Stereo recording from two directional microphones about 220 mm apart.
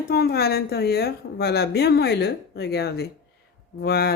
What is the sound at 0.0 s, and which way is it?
A woman's voice, 45° left (ahead or behind).